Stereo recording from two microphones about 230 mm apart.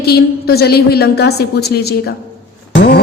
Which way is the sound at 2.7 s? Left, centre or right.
Left.